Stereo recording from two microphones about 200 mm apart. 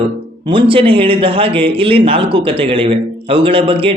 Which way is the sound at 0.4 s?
25° right (ahead or behind).